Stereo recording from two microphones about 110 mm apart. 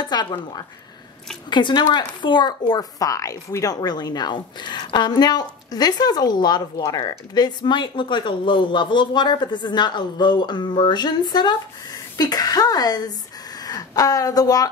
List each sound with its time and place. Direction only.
0.0 s speech: 40° left (ahead or behind)